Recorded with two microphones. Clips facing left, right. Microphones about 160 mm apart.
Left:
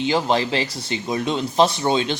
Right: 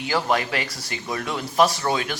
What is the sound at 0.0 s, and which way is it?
Speech, 20° left (ahead or behind).